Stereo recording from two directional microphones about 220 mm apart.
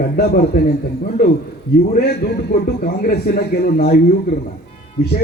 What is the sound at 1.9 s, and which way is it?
A man's voice, 45° left (ahead or behind).